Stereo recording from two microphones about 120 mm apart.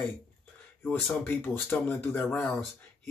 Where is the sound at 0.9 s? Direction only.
15° left (ahead or behind).